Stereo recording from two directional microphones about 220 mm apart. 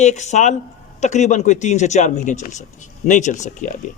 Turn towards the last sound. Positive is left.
turn(degrees=35)  # may be behind; listen again after turning